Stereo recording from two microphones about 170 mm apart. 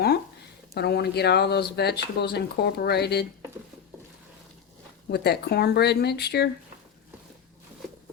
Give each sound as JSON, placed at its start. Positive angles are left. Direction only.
{"t": 0.7, "sound": "speech", "side_deg": 70}
{"t": 5.1, "sound": "speech", "side_deg": 75}